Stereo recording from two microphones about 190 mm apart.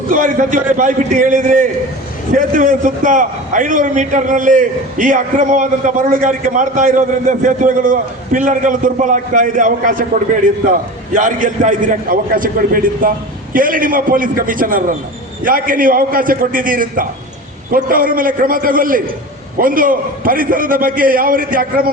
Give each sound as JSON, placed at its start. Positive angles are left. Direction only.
{"t": 0.1, "sound": "a man's voice", "side_deg": -45}